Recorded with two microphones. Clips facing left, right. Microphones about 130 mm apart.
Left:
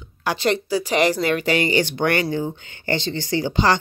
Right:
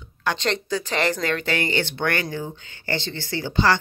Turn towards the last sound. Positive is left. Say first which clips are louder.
# left 2 dB
turn(degrees=15)  # may be behind; listen again after turning